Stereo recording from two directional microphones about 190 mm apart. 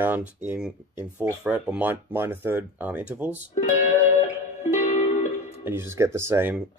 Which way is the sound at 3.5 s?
40° left (ahead or behind).